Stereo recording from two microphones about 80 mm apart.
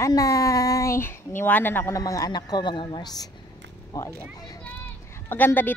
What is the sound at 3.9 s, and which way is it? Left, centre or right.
Speech, left.